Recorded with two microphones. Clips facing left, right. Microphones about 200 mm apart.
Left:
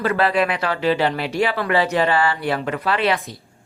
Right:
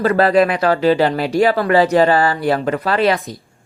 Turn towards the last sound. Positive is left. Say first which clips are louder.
# right 4 dB
turn(degrees=-40)  # may be behind; listen again after turning